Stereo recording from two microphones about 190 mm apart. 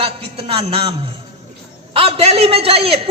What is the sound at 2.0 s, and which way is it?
A man's voice, 30° right (ahead or behind).